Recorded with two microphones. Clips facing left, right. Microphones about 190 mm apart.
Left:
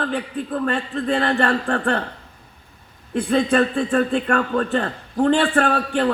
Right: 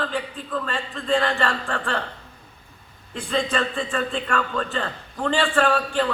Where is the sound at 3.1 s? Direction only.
60° left (ahead or behind).